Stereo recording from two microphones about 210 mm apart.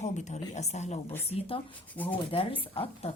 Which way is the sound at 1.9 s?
10° left (ahead or behind).